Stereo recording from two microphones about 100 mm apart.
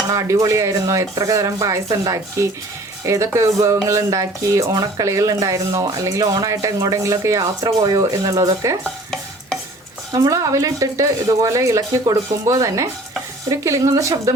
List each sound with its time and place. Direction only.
0.1 s speech: 35° right (ahead or behind)
10.1 s speech: 30° right (ahead or behind)